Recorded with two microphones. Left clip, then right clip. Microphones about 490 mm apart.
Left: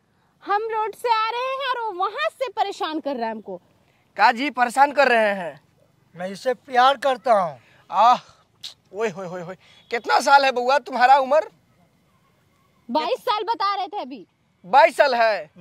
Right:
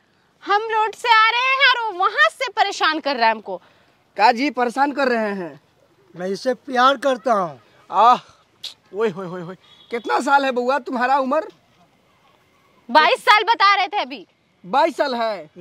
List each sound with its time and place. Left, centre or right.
0.4 s a woman's voice: centre
4.1 s speech: left
12.9 s a woman's voice: centre
14.7 s speech: left